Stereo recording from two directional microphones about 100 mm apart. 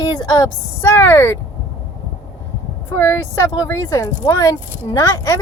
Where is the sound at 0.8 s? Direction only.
25° left (ahead or behind).